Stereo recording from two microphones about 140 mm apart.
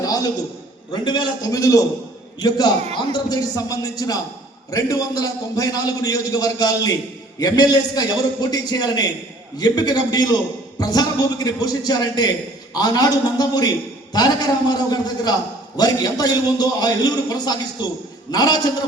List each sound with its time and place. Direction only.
0.0 s a sound: 25° left (ahead or behind)
0.9 s a man's voice: 35° left (ahead or behind)
14.7 s a man's voice: 30° left (ahead or behind)